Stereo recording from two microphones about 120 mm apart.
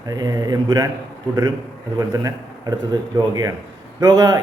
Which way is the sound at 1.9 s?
30° right (ahead or behind).